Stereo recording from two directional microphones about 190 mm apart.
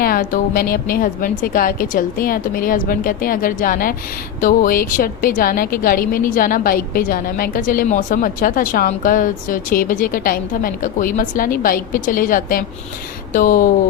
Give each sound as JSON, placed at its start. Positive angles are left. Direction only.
{"t": 0.0, "sound": "a woman's voice", "side_deg": 50}